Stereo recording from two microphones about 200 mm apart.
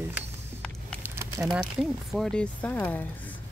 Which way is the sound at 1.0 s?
15° right (ahead or behind).